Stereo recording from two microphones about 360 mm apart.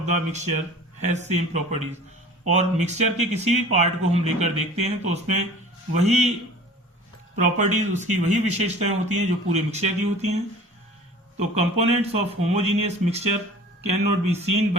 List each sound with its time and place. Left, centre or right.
0.0 s speech: centre
7.6 s speech: centre
11.5 s speech: centre